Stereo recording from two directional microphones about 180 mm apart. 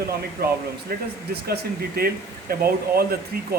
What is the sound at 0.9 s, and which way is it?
Speech, 60° right (ahead or behind).